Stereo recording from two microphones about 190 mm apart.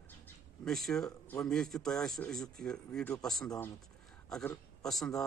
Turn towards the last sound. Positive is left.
turn(degrees=0)  # may be behind; listen again after turning